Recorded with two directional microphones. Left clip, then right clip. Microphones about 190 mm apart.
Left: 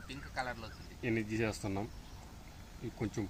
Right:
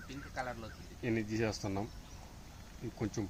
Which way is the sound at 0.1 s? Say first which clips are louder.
Left 2 dB; 55° right (ahead or behind).